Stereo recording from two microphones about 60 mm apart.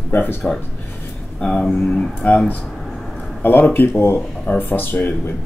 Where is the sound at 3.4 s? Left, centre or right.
Left.